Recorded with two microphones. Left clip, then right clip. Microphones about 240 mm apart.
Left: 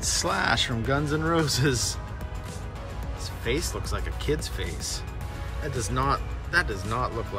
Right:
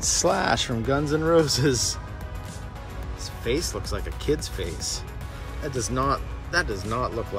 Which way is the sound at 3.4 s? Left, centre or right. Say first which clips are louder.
Right 2 dB; centre.